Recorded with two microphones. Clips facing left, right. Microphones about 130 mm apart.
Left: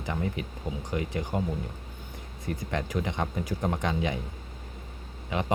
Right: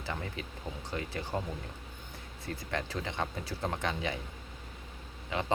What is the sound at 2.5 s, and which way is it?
Speech, 20° left (ahead or behind).